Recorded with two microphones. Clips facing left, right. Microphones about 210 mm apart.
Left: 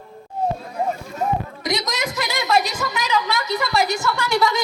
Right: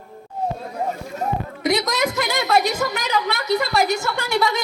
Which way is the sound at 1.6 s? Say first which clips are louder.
Right 7 dB; 60° right (ahead or behind).